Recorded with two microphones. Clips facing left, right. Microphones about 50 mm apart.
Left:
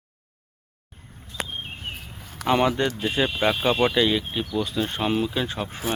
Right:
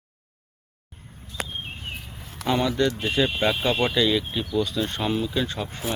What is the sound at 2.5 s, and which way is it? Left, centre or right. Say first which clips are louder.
Speech: left 3 dB; left.